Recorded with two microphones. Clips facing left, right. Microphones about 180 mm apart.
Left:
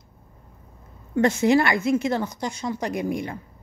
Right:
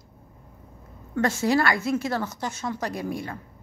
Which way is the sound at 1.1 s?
20° left (ahead or behind).